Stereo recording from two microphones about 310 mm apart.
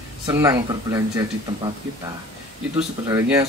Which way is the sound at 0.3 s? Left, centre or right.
Centre.